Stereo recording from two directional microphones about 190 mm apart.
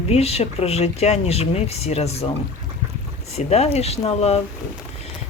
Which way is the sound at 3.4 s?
35° left (ahead or behind).